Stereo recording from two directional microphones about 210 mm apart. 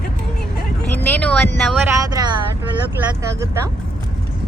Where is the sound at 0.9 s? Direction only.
5° left (ahead or behind).